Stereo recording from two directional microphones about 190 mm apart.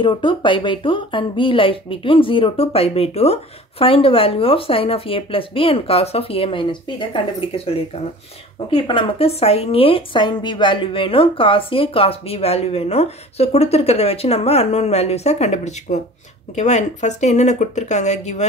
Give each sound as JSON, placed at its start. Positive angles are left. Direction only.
{"t": 0.0, "sound": "speech", "side_deg": 25}